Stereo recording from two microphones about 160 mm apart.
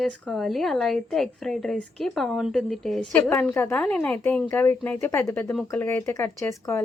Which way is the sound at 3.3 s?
15° left (ahead or behind).